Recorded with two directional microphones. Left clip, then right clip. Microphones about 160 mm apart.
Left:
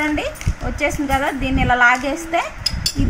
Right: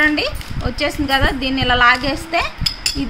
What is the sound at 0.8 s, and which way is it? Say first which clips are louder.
A woman's voice: right 2 dB; 5° right (ahead or behind).